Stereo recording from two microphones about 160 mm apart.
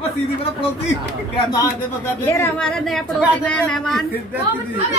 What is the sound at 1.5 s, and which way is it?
Speech, 20° left (ahead or behind).